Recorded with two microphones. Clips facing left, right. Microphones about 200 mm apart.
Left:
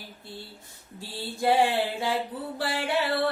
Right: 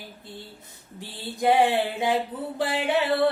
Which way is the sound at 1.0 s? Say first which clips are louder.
Right 2 dB; 20° right (ahead or behind).